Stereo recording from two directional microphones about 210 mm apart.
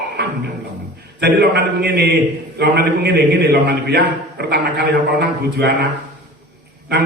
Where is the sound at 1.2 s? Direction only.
50° right (ahead or behind).